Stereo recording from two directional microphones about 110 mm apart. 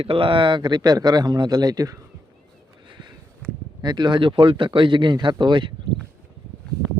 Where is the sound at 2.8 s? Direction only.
45° right (ahead or behind).